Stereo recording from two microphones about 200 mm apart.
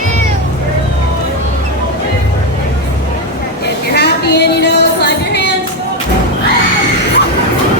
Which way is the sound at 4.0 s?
55° left (ahead or behind).